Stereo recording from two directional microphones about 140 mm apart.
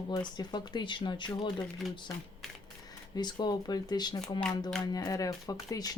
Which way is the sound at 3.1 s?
30° left (ahead or behind).